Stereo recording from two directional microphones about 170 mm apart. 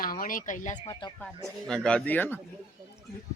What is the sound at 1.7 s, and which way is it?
Speech, 5° left (ahead or behind).